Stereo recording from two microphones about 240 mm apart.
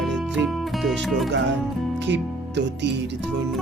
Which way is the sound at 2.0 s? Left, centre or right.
Right.